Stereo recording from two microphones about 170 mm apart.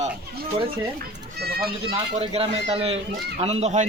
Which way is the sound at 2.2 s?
35° right (ahead or behind).